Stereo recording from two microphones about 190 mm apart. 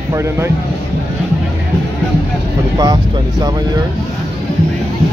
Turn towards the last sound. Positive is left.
turn(degrees=-20)  # may be behind; listen again after turning